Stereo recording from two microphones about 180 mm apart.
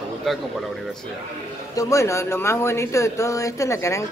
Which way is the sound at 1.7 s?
20° left (ahead or behind).